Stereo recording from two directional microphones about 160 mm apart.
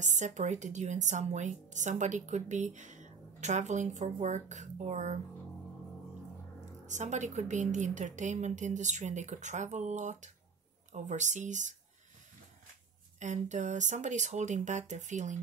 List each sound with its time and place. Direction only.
0.0 s a woman's voice: 50° right (ahead or behind)
6.9 s a woman's voice: 50° right (ahead or behind)
13.2 s a woman's voice: 50° right (ahead or behind)